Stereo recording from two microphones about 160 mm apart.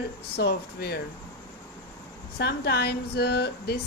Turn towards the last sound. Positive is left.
turn(degrees=90)